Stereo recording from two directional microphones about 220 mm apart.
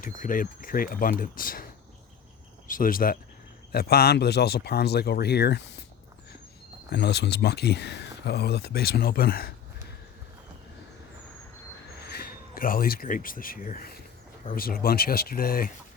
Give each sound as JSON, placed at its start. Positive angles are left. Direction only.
{"t": 0.0, "sound": "speech", "side_deg": 40}
{"t": 2.6, "sound": "speech", "side_deg": 40}
{"t": 6.9, "sound": "speech", "side_deg": 50}
{"t": 11.9, "sound": "speech", "side_deg": 45}